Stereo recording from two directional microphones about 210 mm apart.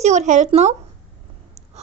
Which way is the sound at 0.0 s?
35° right (ahead or behind).